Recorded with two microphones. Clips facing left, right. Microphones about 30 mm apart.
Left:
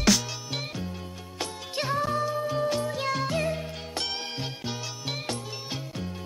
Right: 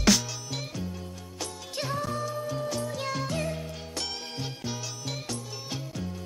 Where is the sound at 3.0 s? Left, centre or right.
Centre.